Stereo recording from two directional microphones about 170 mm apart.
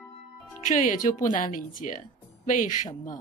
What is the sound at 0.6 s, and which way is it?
Speech, 50° left (ahead or behind).